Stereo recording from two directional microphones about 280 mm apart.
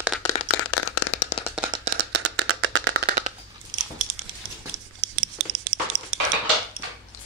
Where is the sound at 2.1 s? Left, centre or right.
Right.